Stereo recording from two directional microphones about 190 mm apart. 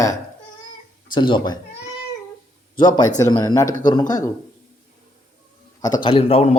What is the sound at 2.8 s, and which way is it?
A man's voice, 20° left (ahead or behind).